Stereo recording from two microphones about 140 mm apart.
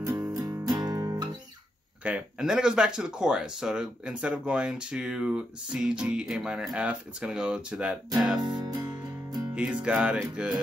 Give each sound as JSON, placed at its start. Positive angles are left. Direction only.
{"t": 0.0, "sound": "music", "side_deg": -20}
{"t": 2.0, "sound": "speech", "side_deg": -10}
{"t": 8.4, "sound": "music", "side_deg": -30}
{"t": 9.6, "sound": "speech", "side_deg": -10}